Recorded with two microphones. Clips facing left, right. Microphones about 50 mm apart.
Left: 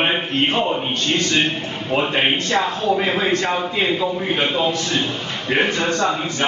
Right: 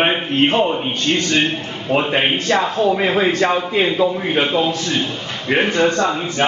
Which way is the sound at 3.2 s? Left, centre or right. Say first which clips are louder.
Right 3 dB; centre.